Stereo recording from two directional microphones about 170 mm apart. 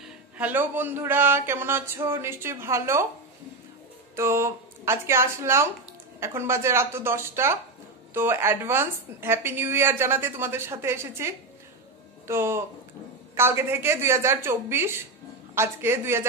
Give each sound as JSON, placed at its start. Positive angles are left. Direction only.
{"t": 0.0, "sound": "a woman's voice", "side_deg": -10}
{"t": 4.1, "sound": "a woman's voice", "side_deg": -15}